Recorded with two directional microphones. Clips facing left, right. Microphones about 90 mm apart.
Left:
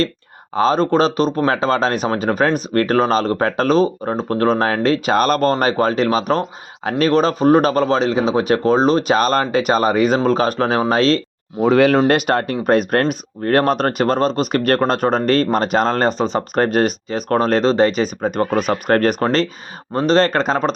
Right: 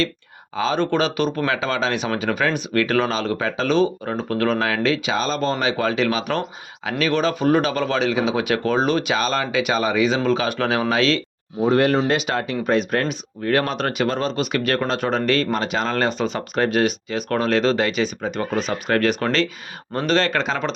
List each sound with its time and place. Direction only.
0.5 s speech: 40° left (ahead or behind)
5.1 s speech: 55° left (ahead or behind); by 11.2 s 40° left (ahead or behind)
11.6 s speech: 90° left
11.9 s speech: 50° left (ahead or behind)
19.9 s speech: 30° left (ahead or behind)